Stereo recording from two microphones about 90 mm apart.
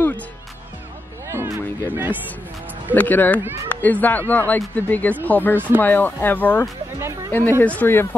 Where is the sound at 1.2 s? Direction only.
30° right (ahead or behind).